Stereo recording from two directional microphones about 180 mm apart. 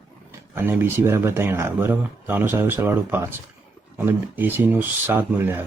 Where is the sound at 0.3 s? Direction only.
10° right (ahead or behind).